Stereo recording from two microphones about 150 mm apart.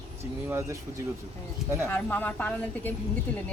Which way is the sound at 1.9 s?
10° left (ahead or behind).